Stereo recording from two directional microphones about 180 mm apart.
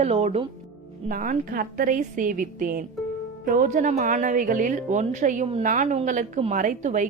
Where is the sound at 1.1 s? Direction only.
50° right (ahead or behind).